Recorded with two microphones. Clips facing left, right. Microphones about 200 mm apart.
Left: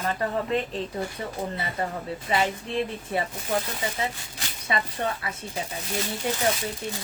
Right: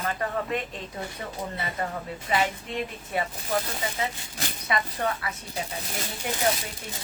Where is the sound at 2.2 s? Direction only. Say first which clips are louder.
Left 1 dB; 30° left (ahead or behind).